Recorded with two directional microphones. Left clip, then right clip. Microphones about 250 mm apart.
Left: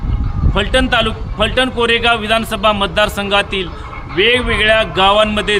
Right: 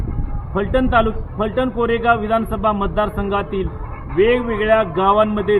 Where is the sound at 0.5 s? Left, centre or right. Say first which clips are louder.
Left 2 dB; left.